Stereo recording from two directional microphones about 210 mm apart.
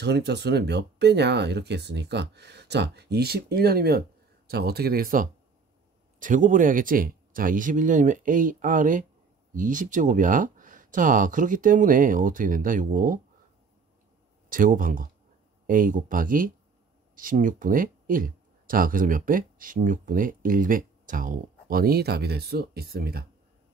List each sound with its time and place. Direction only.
0.0 s speech: 55° right (ahead or behind)
14.5 s speech: 40° right (ahead or behind)